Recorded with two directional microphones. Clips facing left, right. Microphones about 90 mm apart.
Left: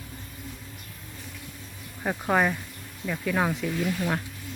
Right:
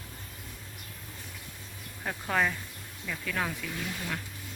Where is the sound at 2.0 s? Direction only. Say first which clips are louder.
Left 5 dB; 20° left (ahead or behind).